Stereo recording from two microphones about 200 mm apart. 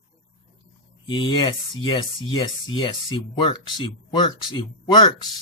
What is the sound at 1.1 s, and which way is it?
Speech, 25° left (ahead or behind).